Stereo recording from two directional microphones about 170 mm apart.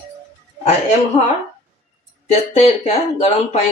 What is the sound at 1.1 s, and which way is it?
Speech, 40° left (ahead or behind).